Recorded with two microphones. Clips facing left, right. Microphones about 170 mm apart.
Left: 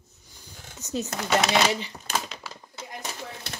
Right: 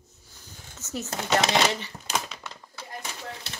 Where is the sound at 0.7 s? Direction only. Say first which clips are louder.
Left 4 dB; 15° left (ahead or behind).